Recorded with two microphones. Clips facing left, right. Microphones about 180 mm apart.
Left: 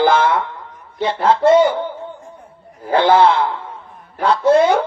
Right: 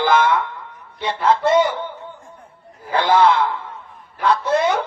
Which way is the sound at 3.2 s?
30° left (ahead or behind).